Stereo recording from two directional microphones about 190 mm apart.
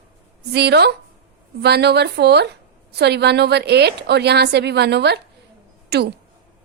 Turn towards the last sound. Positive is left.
turn(degrees=-60)  # may be behind; listen again after turning